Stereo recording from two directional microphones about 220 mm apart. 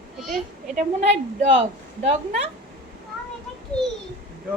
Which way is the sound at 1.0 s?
30° right (ahead or behind).